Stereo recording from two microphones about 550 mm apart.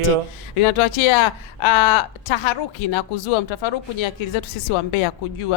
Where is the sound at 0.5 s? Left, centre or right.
Left.